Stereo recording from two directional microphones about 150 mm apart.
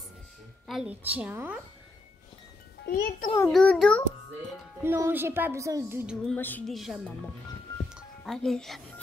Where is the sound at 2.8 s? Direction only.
80° left.